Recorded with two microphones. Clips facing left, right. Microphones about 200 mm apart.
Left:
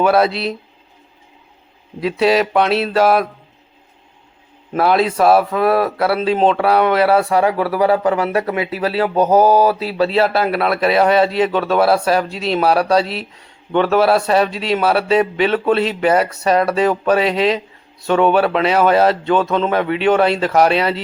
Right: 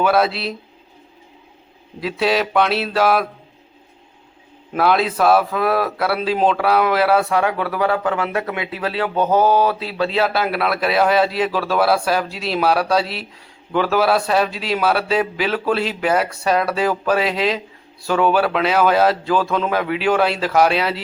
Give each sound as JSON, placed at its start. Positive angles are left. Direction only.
{"t": 0.0, "sound": "speech", "side_deg": 0}
{"t": 2.0, "sound": "speech", "side_deg": 0}
{"t": 4.7, "sound": "speech", "side_deg": 0}
{"t": 7.9, "sound": "speech", "side_deg": 40}
{"t": 10.0, "sound": "speech", "side_deg": 0}